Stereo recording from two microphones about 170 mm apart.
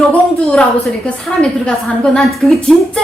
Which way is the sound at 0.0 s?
5° left (ahead or behind).